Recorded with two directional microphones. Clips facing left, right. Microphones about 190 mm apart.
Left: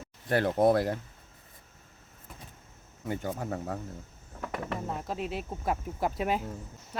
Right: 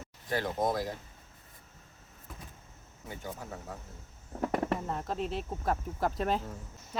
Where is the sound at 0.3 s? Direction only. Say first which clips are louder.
Left 7 dB; 65° left (ahead or behind).